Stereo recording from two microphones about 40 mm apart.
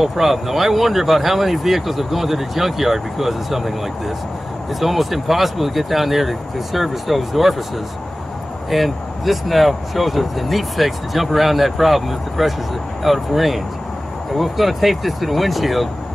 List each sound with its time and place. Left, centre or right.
0.0 s speech: centre
8.6 s speech: centre